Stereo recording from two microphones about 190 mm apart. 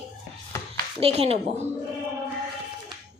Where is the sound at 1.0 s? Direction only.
30° right (ahead or behind).